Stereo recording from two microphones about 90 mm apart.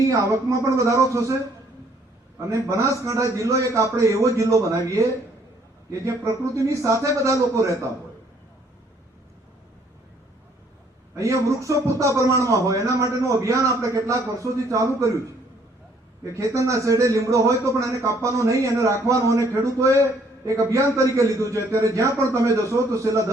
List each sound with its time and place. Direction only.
0.0 s a man's voice: 40° right (ahead or behind)
2.4 s a man's voice: 35° right (ahead or behind)
11.1 s a man's voice: 35° right (ahead or behind)
16.2 s a man's voice: 35° right (ahead or behind)